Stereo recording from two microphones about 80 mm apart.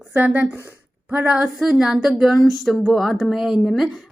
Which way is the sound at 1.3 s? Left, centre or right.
Centre.